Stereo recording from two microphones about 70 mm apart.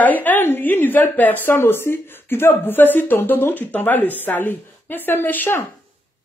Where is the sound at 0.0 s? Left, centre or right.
Left.